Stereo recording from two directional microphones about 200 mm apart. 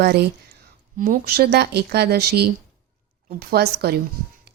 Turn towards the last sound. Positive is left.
turn(degrees=-50)  # may be behind; listen again after turning